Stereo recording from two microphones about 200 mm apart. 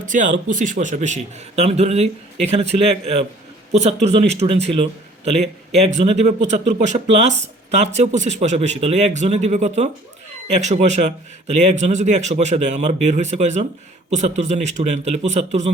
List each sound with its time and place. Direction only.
0.0 s a man's voice: 40° right (ahead or behind)